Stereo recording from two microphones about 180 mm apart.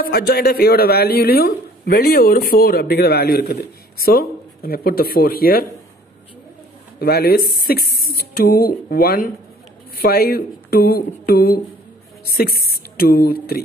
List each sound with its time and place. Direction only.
0.0 s speech: 60° left (ahead or behind)
7.0 s speech: 60° left (ahead or behind)